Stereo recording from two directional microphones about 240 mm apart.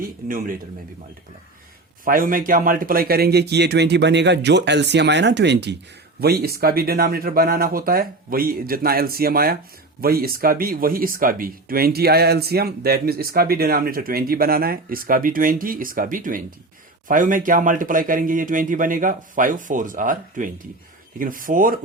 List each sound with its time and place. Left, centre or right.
0.0 s speech: right
2.0 s speech: right